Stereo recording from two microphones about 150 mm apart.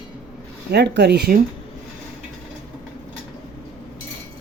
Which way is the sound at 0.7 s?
90° right.